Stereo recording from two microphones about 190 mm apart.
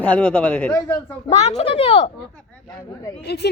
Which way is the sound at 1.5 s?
30° left (ahead or behind).